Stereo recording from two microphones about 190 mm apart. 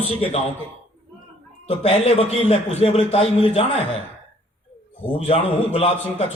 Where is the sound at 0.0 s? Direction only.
35° left (ahead or behind).